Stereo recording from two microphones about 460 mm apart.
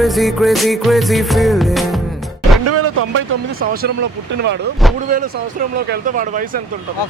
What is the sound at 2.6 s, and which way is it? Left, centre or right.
A man's voice, right.